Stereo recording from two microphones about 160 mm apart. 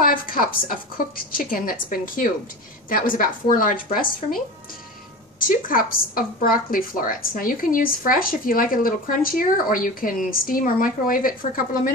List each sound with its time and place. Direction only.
0.0 s a woman's voice: 65° left (ahead or behind)
5.5 s a woman's voice: 60° left (ahead or behind)